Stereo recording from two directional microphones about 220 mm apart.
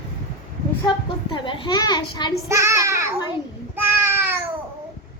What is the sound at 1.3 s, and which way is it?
A woman's voice, 20° left (ahead or behind).